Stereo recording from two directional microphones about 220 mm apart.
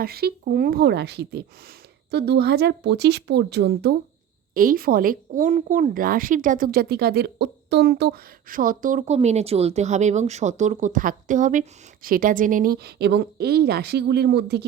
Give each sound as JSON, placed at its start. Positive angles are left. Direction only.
{"t": 0.0, "sound": "a woman's voice", "side_deg": -45}